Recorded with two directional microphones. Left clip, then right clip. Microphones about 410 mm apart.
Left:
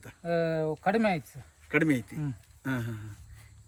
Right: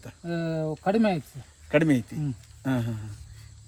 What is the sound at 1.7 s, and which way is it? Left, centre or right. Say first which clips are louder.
Speech: right 4 dB; centre.